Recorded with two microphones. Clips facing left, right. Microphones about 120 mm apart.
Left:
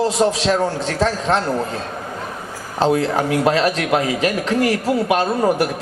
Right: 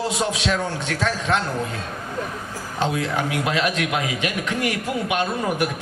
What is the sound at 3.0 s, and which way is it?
A man's voice, 35° left (ahead or behind).